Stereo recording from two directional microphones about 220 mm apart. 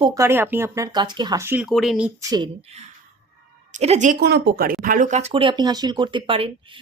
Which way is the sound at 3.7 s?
30° right (ahead or behind).